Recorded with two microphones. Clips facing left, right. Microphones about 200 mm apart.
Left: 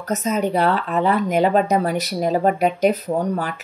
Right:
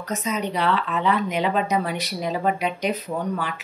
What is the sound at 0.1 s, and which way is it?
Speech, 45° left (ahead or behind).